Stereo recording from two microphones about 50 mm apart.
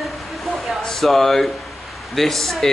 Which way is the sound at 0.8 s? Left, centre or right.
Centre.